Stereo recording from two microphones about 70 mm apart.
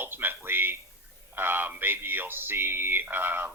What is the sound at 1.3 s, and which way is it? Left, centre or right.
Speech, right.